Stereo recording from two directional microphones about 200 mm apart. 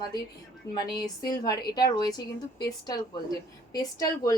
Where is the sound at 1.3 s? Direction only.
20° left (ahead or behind).